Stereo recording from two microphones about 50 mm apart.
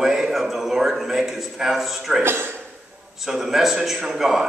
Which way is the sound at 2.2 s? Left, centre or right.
Right.